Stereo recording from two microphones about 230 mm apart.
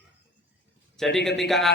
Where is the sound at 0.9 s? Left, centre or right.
Centre.